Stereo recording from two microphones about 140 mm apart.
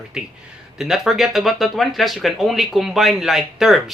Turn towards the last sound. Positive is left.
turn(degrees=0)  # may be behind; listen again after turning